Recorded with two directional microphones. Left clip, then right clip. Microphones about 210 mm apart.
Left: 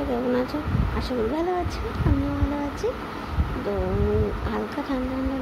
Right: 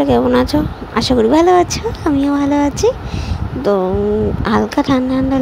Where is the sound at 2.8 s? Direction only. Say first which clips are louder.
Right 13 dB; 45° right (ahead or behind).